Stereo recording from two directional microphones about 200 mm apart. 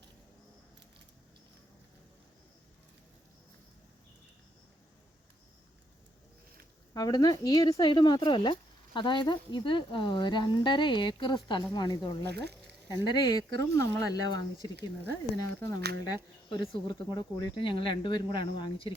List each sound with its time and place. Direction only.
6.9 s speech: 20° left (ahead or behind)
12.2 s speech: 55° right (ahead or behind)
13.1 s speech: 20° left (ahead or behind)